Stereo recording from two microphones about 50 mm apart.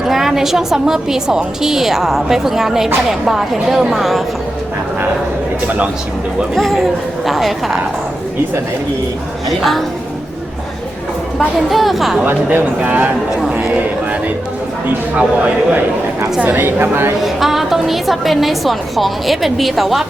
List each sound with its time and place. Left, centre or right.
0.1 s a woman's voice: centre
6.5 s a woman's voice: centre
9.5 s a woman's voice: centre
11.3 s a woman's voice: centre
12.2 s speech: right
15.2 s a man's voice: right
16.6 s a woman's voice: right
17.2 s a woman's voice: centre